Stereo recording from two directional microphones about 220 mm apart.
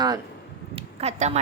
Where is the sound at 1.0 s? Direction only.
30° right (ahead or behind).